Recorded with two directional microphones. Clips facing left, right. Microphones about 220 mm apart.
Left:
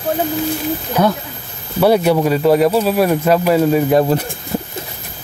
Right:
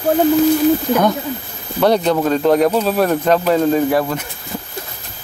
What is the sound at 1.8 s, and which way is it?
Speech, 10° left (ahead or behind).